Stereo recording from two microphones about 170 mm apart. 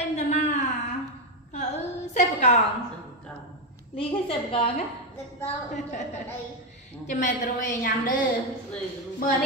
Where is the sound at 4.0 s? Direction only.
35° left (ahead or behind).